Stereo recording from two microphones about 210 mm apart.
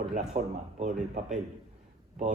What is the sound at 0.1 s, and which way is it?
Speech, 35° right (ahead or behind).